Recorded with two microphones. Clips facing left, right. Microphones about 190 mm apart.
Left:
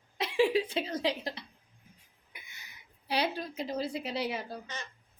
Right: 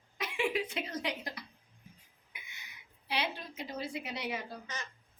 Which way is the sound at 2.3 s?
40° left (ahead or behind).